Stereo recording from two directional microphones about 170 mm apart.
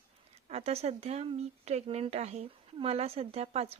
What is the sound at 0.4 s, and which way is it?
Speech, 40° right (ahead or behind).